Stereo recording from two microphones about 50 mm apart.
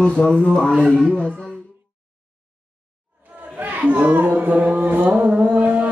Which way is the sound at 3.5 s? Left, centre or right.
Right.